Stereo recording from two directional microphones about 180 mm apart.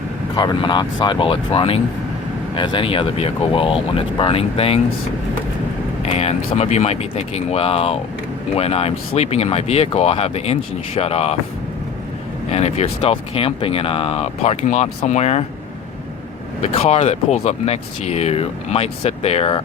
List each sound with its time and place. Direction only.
0.3 s speech: 25° left (ahead or behind)
6.0 s speech: 35° left (ahead or behind)
12.5 s speech: 35° left (ahead or behind)
16.7 s speech: 35° left (ahead or behind)